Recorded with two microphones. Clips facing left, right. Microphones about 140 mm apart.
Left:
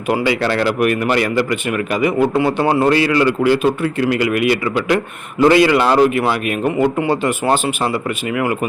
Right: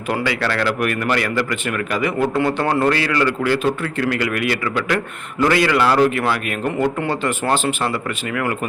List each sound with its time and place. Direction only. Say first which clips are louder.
0.1 s a man's voice: left 5 dB; 20° left (ahead or behind)